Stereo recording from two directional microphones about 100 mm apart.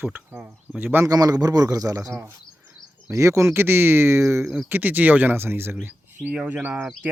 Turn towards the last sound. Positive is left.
turn(degrees=-10)  # may be behind; listen again after turning